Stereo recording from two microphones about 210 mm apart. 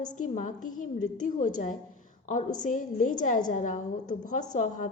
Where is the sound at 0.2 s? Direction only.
35° left (ahead or behind).